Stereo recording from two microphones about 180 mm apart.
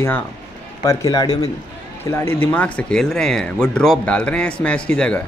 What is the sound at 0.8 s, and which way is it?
A man's voice, 20° left (ahead or behind).